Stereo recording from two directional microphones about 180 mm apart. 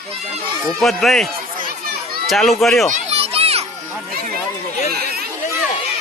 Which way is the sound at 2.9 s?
35° right (ahead or behind).